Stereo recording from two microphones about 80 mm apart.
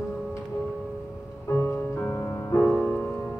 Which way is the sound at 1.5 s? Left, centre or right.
Left.